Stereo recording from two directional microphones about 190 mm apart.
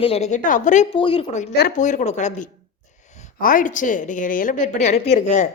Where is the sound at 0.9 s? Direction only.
25° left (ahead or behind).